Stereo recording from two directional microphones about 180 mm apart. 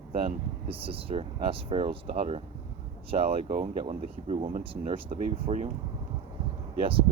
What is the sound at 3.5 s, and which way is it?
Speech, 45° right (ahead or behind).